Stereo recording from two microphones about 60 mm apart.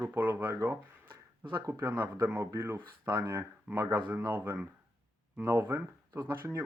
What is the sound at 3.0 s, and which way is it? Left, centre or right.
Speech, right.